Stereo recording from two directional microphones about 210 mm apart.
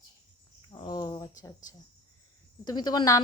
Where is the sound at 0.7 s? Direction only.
20° left (ahead or behind).